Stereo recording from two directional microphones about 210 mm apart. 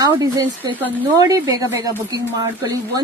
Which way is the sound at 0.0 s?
20° right (ahead or behind).